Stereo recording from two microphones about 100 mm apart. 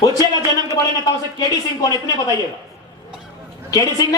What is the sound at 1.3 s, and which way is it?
Speech, 40° left (ahead or behind).